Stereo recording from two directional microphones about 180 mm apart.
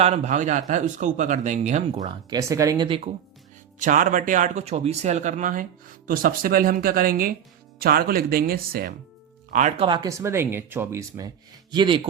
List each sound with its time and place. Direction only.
0.0 s speech: 40° right (ahead or behind)
2.0 s speech: 20° right (ahead or behind)
3.8 s speech: 45° right (ahead or behind)
9.5 s speech: 40° right (ahead or behind)
9.8 s speech: 25° right (ahead or behind)
11.7 s speech: 25° right (ahead or behind)